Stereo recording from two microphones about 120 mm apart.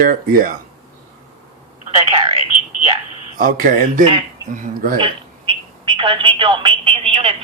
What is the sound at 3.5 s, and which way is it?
Speech, 90° right.